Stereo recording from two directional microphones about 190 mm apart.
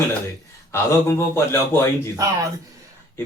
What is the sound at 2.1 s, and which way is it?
Speech, 15° right (ahead or behind).